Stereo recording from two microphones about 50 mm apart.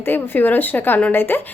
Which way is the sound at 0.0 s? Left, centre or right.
Left.